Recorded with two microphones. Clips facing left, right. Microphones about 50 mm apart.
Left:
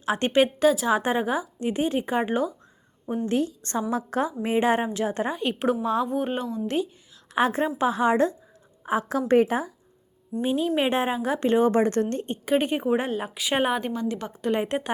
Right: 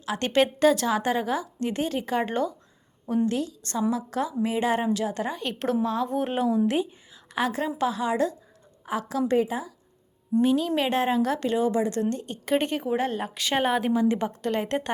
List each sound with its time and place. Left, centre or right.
0.0 s a woman's voice: left
0.4 s speech: centre
0.9 s a woman's voice: left
3.2 s speech: left
5.3 s a woman's voice: centre
6.1 s speech: centre
7.3 s speech: left
10.4 s a woman's voice: left
11.4 s a woman's voice: left
12.5 s speech: centre
12.7 s a woman's voice: left
13.1 s speech: centre
13.7 s speech: centre
14.4 s speech: centre